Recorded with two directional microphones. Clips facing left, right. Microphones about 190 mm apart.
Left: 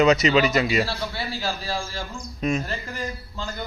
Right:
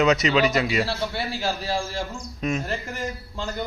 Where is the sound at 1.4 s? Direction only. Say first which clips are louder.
Right 3 dB; 25° right (ahead or behind).